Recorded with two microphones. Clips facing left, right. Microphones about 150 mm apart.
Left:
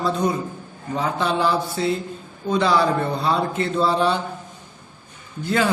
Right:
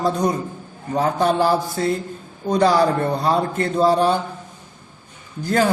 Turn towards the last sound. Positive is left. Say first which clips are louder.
# right 2 dB
turn(degrees=-45)  # may be behind; listen again after turning